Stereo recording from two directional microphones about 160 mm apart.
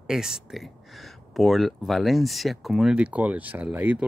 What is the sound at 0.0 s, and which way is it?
Speech, 5° right (ahead or behind).